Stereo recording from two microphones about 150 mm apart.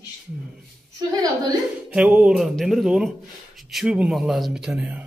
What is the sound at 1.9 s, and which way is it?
A man's voice, 5° right (ahead or behind).